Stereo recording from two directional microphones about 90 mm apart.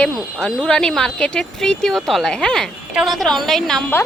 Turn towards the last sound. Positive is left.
turn(degrees=5)  # may be behind; listen again after turning